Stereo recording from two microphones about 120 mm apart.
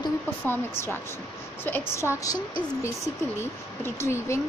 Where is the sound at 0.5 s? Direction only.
20° left (ahead or behind).